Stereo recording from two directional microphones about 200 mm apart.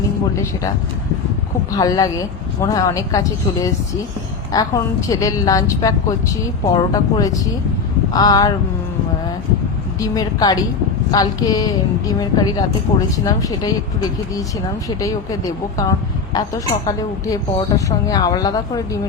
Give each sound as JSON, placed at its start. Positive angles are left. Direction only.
{"t": 1.7, "sound": "a woman's voice", "side_deg": 20}
{"t": 10.0, "sound": "a woman's voice", "side_deg": 20}